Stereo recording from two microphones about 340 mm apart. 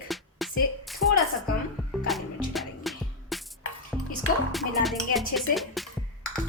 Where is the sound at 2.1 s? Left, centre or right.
Centre.